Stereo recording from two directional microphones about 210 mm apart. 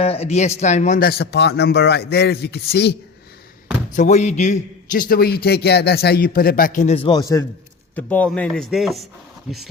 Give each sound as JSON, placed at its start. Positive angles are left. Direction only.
{"t": 0.0, "sound": "a man's voice", "side_deg": 30}
{"t": 3.9, "sound": "a man's voice", "side_deg": 35}
{"t": 7.9, "sound": "speech", "side_deg": 5}